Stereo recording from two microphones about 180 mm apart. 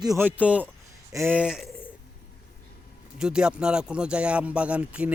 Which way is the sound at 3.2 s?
5° right (ahead or behind).